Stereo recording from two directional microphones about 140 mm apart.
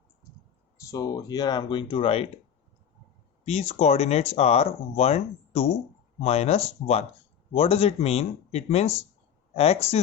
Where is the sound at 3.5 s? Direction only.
50° left (ahead or behind).